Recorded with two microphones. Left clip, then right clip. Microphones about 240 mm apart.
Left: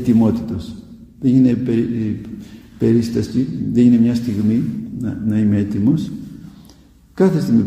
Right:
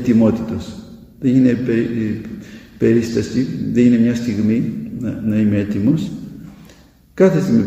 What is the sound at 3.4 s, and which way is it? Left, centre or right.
A man's voice, left.